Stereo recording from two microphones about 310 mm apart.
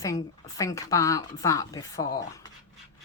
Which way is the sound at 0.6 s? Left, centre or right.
Centre.